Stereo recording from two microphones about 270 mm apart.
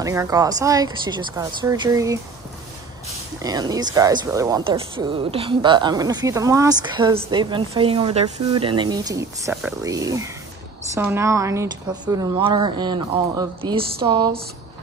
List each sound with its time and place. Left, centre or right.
0.0 s speech: centre
3.4 s speech: centre